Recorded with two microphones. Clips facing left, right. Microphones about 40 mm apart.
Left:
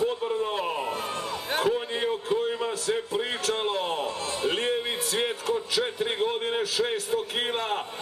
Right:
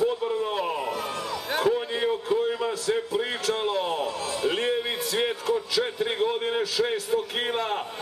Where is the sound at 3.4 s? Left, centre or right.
Left.